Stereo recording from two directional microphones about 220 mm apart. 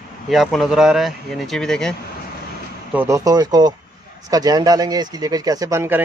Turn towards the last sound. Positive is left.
turn(degrees=-10)  # may be behind; listen again after turning